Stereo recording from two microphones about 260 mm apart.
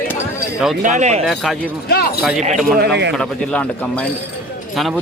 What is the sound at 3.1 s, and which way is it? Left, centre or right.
A man's voice, centre.